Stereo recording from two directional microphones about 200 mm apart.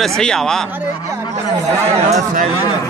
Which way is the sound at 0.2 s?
5° left (ahead or behind).